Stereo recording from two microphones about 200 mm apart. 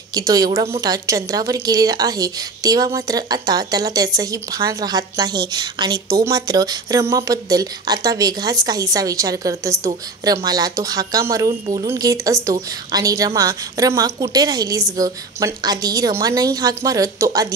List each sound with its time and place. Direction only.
0.1 s a woman's voice: 20° right (ahead or behind)